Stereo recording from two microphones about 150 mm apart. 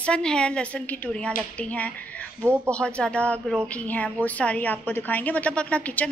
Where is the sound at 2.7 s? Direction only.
5° left (ahead or behind).